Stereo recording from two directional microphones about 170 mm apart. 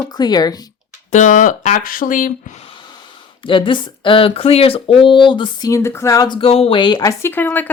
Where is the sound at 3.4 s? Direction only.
30° left (ahead or behind).